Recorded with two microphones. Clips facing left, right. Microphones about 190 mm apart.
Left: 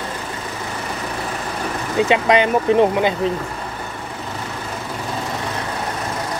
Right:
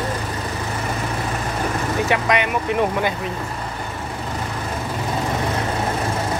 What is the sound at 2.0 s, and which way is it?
Speech, 25° left (ahead or behind).